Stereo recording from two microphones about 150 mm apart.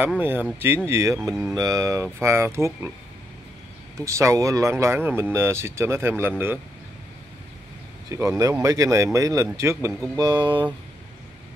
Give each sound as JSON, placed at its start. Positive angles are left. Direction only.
{"t": 0.2, "sound": "speech", "side_deg": -15}
{"t": 4.0, "sound": "speech", "side_deg": -20}
{"t": 8.1, "sound": "speech", "side_deg": -20}